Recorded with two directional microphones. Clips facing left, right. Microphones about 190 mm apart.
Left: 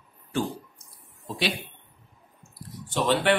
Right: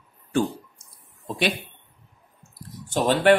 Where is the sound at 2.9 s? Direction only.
45° right (ahead or behind).